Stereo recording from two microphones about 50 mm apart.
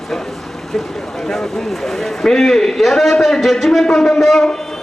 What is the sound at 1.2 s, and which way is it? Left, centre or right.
A man's voice, centre.